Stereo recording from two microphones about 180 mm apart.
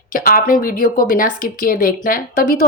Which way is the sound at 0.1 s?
55° left (ahead or behind).